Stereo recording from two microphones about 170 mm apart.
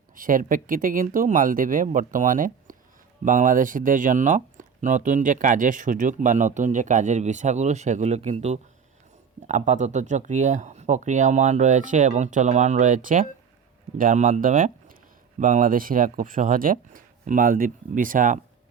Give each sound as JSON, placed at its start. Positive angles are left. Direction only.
{"t": 0.2, "sound": "speech", "side_deg": -55}